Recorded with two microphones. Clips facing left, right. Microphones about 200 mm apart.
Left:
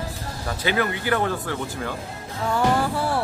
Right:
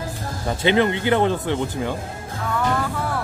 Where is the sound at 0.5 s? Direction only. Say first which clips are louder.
Right 6 dB; 25° right (ahead or behind).